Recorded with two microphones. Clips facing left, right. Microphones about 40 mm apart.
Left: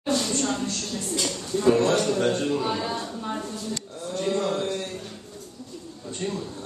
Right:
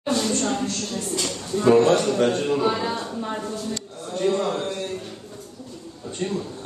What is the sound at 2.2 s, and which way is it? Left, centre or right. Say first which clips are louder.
Speech: right 3 dB; centre.